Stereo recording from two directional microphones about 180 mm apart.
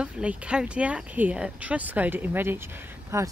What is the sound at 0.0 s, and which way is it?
Speech, 5° right (ahead or behind).